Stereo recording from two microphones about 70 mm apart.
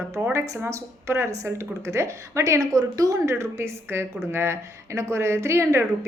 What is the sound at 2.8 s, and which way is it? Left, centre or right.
A woman's voice, right.